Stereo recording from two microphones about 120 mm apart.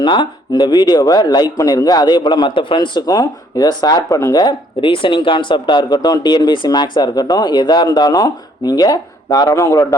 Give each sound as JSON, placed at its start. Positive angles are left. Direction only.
{"t": 0.0, "sound": "a man's voice", "side_deg": 40}